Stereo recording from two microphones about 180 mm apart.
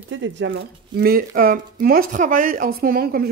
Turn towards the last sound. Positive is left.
turn(degrees=-55)  # may be behind; listen again after turning